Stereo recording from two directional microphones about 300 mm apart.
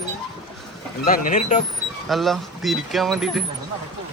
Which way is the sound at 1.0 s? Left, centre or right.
Left.